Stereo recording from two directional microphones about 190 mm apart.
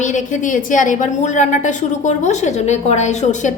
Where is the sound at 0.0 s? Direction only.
40° left (ahead or behind).